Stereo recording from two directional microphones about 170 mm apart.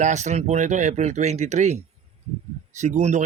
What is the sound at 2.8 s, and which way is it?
Speech, 45° right (ahead or behind).